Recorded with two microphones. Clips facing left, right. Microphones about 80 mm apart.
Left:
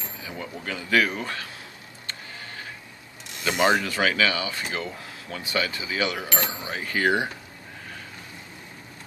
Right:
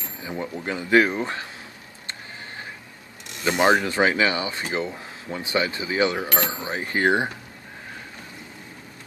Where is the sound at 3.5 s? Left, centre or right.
Right.